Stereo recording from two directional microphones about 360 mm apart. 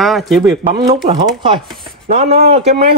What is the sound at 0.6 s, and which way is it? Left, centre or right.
Speech, centre.